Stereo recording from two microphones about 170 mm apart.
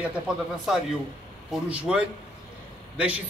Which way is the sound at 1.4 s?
5° right (ahead or behind).